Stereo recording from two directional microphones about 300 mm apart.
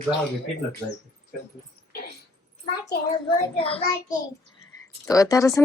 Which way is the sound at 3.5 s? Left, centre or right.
Centre.